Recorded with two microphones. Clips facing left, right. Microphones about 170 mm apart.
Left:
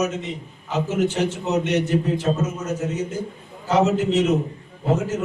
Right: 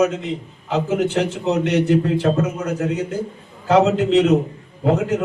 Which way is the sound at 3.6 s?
75° right (ahead or behind).